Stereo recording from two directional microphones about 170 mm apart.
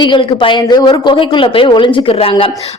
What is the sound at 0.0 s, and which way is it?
A woman's voice, 30° left (ahead or behind).